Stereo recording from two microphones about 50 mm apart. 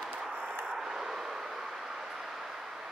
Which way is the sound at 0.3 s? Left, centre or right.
Right.